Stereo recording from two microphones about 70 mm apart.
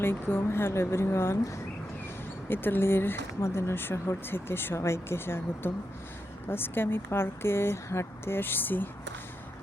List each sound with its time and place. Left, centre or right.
0.0 s speech: left